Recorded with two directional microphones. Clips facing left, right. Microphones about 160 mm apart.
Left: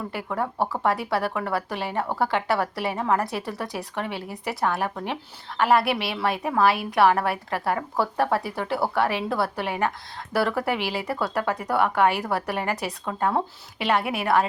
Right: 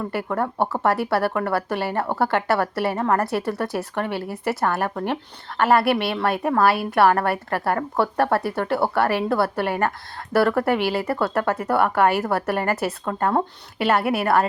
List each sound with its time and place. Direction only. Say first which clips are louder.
0.1 s a woman's voice: right 4 dB; centre (ahead or behind)